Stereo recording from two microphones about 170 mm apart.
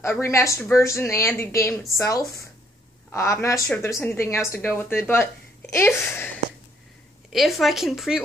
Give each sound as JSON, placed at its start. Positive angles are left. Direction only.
{"t": 0.0, "sound": "speech", "side_deg": 15}
{"t": 7.3, "sound": "speech", "side_deg": 0}